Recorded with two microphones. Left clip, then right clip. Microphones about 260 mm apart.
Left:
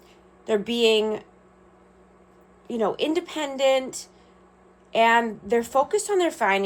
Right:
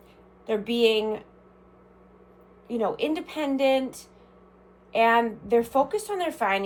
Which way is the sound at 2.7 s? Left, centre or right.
Left.